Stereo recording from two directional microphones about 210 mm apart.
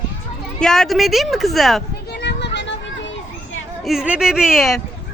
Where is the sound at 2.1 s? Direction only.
55° left (ahead or behind).